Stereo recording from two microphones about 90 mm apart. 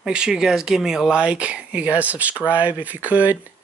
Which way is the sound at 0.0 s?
10° right (ahead or behind).